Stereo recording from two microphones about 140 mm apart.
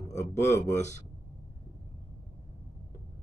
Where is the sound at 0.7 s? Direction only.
55° left (ahead or behind).